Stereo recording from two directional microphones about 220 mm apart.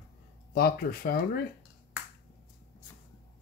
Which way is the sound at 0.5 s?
45° left (ahead or behind).